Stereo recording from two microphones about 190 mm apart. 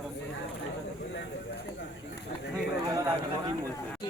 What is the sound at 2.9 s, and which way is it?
Speech, 20° right (ahead or behind).